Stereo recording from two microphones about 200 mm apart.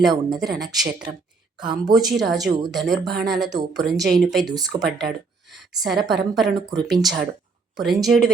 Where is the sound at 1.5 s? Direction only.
20° right (ahead or behind).